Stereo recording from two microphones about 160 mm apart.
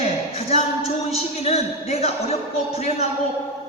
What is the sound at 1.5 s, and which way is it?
Speech, 40° left (ahead or behind).